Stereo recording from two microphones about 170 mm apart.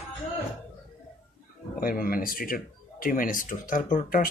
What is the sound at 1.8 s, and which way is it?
Speech, 55° left (ahead or behind).